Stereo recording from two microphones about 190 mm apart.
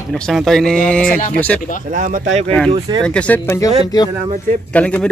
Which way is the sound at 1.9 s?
45° right (ahead or behind).